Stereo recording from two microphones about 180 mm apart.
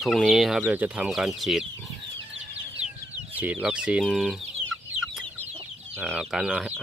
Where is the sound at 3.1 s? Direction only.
10° right (ahead or behind).